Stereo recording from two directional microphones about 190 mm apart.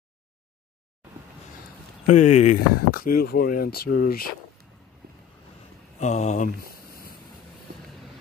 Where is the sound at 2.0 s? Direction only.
40° left (ahead or behind).